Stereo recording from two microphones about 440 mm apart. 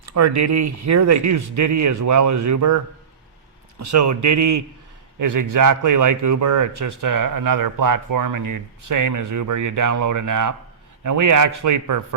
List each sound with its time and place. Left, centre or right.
0.1 s a man's voice: right